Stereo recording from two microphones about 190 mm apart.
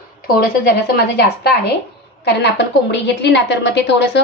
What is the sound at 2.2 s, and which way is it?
A woman's voice, 65° left (ahead or behind).